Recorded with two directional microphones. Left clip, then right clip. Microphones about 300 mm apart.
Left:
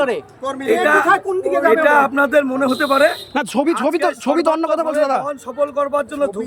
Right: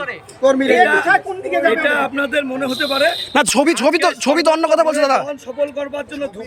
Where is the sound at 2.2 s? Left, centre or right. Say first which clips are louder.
Left 4 dB; left.